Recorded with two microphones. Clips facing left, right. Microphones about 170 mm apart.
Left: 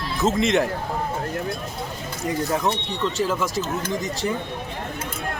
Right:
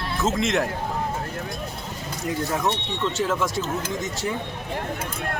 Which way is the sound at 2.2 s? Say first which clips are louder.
Left 2 dB; centre (ahead or behind).